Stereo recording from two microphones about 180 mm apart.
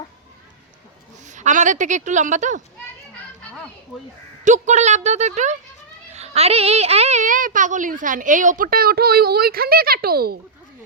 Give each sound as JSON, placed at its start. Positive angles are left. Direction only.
{"t": 1.3, "sound": "a woman's voice", "side_deg": -40}
{"t": 4.4, "sound": "a woman's voice", "side_deg": -40}